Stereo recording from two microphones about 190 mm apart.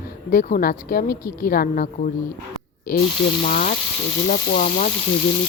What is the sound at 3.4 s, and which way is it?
A woman's voice, 45° left (ahead or behind).